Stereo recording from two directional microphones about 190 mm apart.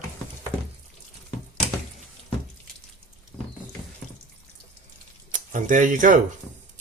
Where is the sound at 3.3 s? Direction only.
10° left (ahead or behind).